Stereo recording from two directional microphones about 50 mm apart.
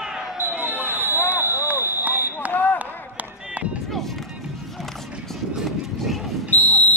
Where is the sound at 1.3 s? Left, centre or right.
Right.